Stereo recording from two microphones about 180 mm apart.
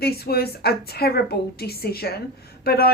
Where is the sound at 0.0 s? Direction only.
60° left (ahead or behind).